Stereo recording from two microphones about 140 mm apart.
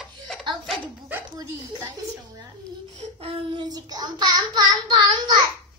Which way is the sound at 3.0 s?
45° right (ahead or behind).